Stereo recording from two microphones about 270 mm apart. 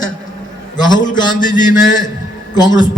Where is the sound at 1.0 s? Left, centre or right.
Left.